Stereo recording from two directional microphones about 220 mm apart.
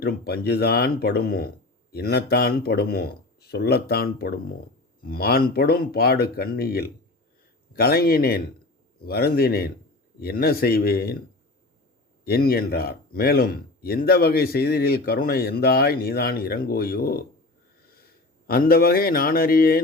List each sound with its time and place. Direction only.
0.0 s speech: 45° left (ahead or behind)
12.2 s speech: 45° left (ahead or behind)
18.4 s speech: 40° left (ahead or behind)